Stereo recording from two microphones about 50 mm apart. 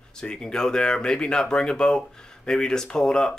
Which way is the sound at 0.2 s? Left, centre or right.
Centre.